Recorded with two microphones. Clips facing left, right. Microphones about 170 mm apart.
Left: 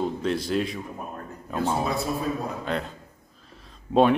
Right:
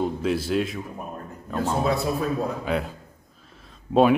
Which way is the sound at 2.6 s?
5° right (ahead or behind).